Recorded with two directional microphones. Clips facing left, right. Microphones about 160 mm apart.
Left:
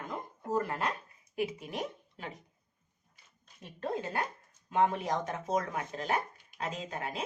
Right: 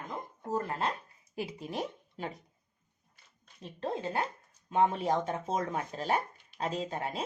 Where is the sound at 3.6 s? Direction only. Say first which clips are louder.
Right 1 dB; 25° right (ahead or behind).